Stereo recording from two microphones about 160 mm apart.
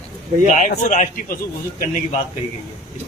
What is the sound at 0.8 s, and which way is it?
Speech, 50° left (ahead or behind).